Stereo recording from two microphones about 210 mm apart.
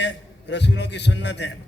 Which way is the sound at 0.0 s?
55° left (ahead or behind).